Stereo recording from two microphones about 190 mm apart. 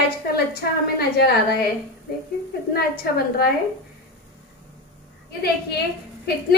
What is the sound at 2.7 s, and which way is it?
Speech, 55° left (ahead or behind).